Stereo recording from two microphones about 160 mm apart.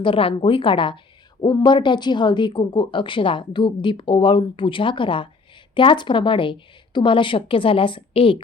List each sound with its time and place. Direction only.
0.0 s a woman's voice: 35° left (ahead or behind)